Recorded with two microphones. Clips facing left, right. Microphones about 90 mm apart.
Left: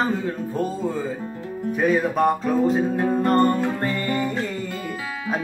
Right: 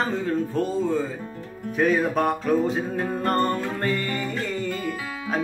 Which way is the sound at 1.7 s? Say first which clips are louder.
Left 1 dB; 5° left (ahead or behind).